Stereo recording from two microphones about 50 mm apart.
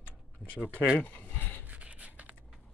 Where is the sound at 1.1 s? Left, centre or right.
Left.